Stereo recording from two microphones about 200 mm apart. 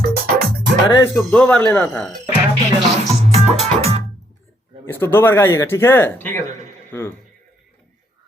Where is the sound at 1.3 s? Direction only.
5° left (ahead or behind).